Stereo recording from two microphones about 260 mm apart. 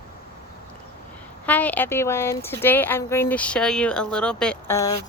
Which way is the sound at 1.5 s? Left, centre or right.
Centre.